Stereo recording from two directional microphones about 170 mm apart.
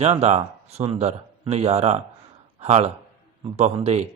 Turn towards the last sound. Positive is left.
turn(degrees=-40)  # may be behind; listen again after turning